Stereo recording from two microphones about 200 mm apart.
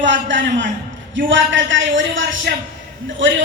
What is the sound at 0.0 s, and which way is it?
A man's voice, 65° right (ahead or behind).